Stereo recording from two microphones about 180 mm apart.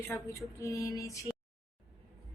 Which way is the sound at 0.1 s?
15° left (ahead or behind).